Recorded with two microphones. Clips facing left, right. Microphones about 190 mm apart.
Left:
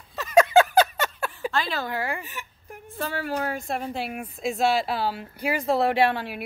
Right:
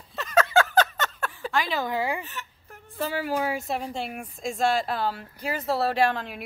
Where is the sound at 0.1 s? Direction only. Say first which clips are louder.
Left 4 dB; 10° left (ahead or behind).